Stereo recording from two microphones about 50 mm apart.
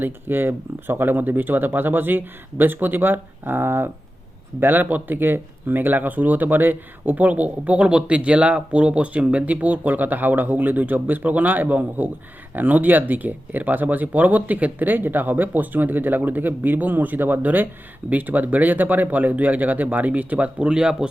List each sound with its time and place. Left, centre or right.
0.0 s speech: right
4.6 s speech: right; by 21.1 s centre